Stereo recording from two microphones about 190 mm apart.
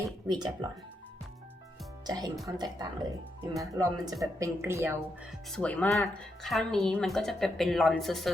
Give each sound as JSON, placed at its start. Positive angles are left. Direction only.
{"t": 0.0, "sound": "speech", "side_deg": -20}
{"t": 2.0, "sound": "a woman's voice", "side_deg": -20}
{"t": 5.5, "sound": "speech", "side_deg": 5}